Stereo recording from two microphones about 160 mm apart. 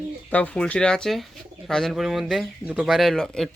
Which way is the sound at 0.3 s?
10° left (ahead or behind).